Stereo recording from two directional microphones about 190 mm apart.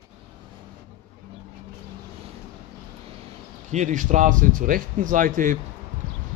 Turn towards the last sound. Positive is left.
turn(degrees=-45)  # may be behind; listen again after turning